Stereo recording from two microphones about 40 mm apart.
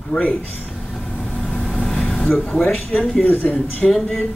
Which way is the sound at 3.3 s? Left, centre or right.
Left.